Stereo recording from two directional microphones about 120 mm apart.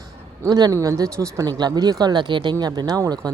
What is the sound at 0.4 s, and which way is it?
Speech, 30° right (ahead or behind).